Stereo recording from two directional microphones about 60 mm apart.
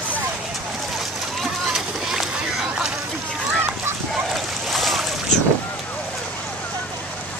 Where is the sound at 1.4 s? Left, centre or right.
Centre.